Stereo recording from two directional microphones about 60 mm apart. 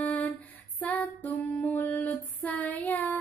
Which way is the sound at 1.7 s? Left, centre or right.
Left.